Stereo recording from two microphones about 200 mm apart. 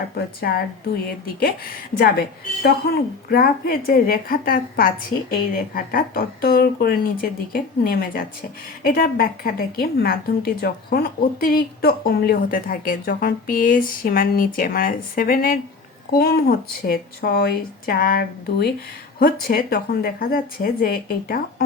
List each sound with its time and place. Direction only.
0.2 s a woman's voice: 50° left (ahead or behind)
2.6 s a woman's voice: 50° left (ahead or behind)